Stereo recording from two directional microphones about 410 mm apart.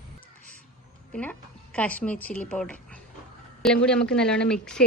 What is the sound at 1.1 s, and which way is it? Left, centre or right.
A woman's voice, centre.